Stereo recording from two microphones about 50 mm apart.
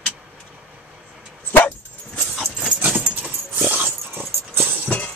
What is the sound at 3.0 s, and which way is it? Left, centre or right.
Dog, right.